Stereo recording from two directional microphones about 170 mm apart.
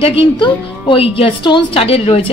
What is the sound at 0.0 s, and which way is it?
A woman's voice, 30° left (ahead or behind).